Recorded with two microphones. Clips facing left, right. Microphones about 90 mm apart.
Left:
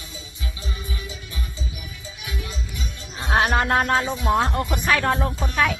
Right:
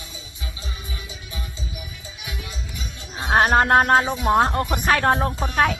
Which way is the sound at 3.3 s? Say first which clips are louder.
Right 4 dB; 45° right (ahead or behind).